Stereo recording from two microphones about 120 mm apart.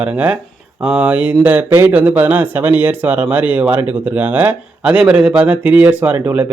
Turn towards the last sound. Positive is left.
turn(degrees=-15)  # may be behind; listen again after turning